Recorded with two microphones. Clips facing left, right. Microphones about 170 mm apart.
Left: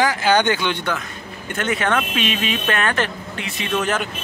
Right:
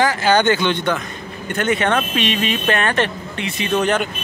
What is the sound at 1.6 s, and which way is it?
Speech, centre (ahead or behind).